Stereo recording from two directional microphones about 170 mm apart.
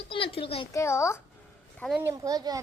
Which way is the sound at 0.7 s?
15° left (ahead or behind).